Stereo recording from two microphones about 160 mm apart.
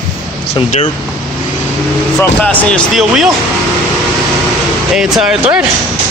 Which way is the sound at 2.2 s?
10° left (ahead or behind).